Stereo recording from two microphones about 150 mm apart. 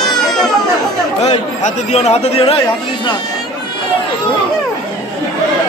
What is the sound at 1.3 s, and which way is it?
A man's voice, 45° left (ahead or behind).